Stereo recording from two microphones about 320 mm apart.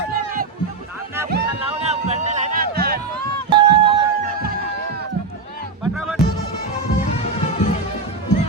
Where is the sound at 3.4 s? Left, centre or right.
Centre.